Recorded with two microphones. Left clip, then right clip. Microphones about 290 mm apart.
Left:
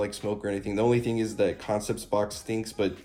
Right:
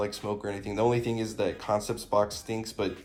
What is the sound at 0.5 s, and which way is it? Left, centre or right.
Speech, centre.